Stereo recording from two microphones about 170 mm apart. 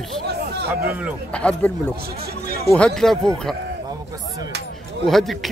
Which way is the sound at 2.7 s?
5° left (ahead or behind).